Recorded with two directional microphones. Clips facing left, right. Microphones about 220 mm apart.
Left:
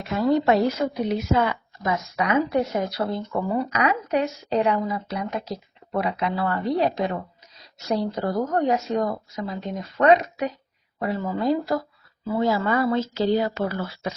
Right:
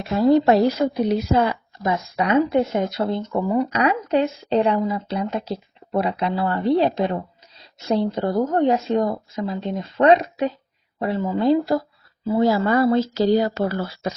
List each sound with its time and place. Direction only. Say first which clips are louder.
0.1 s speech: right 4 dB; 35° right (ahead or behind)
3.8 s speech: right 2 dB; 30° right (ahead or behind)